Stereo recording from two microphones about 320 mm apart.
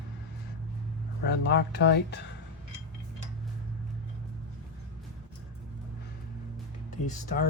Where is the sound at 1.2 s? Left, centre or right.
Left.